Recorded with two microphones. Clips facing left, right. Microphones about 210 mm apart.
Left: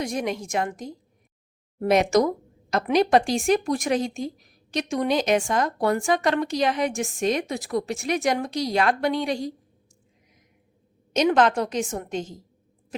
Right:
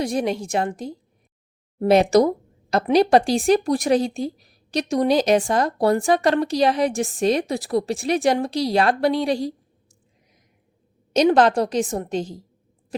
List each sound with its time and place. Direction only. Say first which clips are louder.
0.0 s speech: right 4 dB; 30° right (ahead or behind)
11.1 s speech: right 4 dB; 35° right (ahead or behind)
12.9 s owl: right 5 dB; 35° right (ahead or behind)